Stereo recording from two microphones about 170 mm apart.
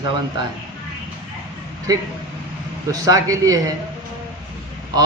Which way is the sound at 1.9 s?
20° right (ahead or behind).